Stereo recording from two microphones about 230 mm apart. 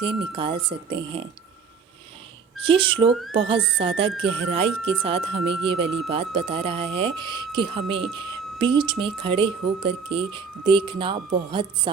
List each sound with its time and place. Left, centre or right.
0.0 s speech: right
2.6 s speech: right